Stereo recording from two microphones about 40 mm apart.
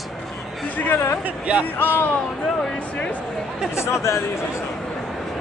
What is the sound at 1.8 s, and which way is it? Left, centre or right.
Speech, left.